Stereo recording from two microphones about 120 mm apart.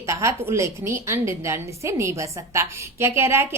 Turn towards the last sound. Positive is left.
turn(degrees=-20)  # may be behind; listen again after turning